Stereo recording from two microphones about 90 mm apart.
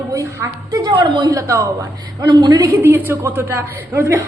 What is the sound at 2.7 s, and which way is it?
A woman's voice, 25° right (ahead or behind).